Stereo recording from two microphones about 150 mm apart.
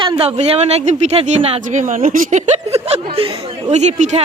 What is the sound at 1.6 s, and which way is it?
Speech, 55° right (ahead or behind).